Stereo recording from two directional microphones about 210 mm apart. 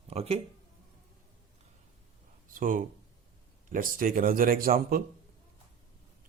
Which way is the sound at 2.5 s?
40° right (ahead or behind).